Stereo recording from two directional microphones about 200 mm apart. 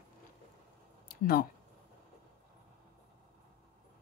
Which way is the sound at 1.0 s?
50° left (ahead or behind).